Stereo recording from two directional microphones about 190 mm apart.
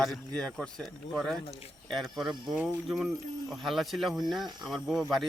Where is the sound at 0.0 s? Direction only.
Centre (ahead or behind).